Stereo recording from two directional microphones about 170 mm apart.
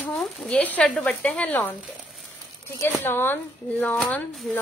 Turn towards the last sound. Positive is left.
turn(degrees=5)  # may be behind; listen again after turning